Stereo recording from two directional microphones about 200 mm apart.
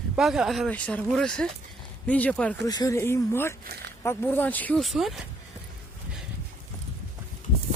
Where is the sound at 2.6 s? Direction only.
15° left (ahead or behind); by 5.2 s centre (ahead or behind).